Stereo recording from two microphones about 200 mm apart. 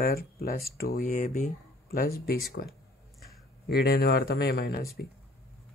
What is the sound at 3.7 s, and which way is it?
Speech, 50° left (ahead or behind).